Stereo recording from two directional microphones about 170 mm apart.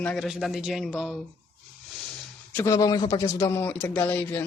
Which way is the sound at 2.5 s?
15° left (ahead or behind).